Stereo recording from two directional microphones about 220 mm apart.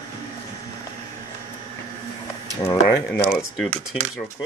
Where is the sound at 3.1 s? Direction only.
Centre (ahead or behind).